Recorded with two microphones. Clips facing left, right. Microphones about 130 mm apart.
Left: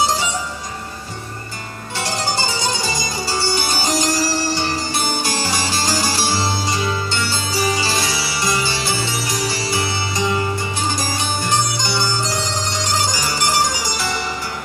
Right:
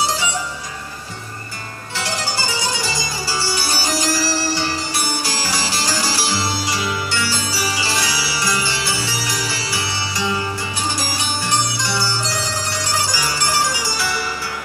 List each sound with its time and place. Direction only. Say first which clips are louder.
2.0 s music: left 2 dB; 25° left (ahead or behind)